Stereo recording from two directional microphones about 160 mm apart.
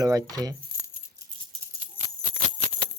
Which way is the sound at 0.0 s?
20° right (ahead or behind).